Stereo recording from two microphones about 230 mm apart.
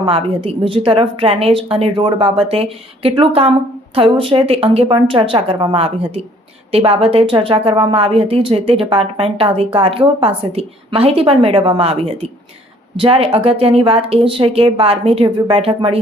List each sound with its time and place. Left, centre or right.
0.0 s speech: right